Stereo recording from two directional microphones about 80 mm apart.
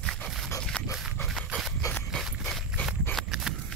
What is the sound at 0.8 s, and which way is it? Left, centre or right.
Dog, centre.